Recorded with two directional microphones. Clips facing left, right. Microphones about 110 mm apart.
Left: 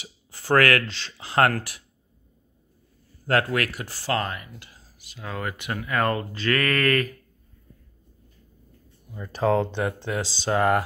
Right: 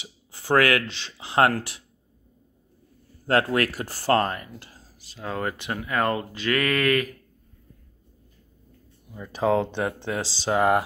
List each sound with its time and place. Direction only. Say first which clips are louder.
0.0 s speech: even; 15° right (ahead or behind)
3.3 s speech: right 1 dB; 25° right (ahead or behind)
9.1 s speech: left 1 dB; 5° right (ahead or behind)
9.4 s speech: even; 15° right (ahead or behind)